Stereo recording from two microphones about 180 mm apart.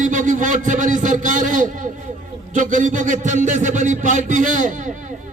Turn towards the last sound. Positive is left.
turn(degrees=-45)  # may be behind; listen again after turning